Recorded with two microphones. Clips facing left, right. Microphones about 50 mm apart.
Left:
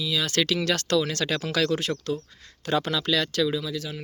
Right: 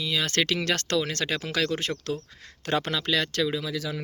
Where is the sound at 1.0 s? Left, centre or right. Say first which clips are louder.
Left 2 dB; right.